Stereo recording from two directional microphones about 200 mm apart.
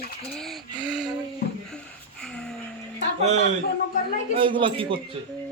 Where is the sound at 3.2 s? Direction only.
35° right (ahead or behind).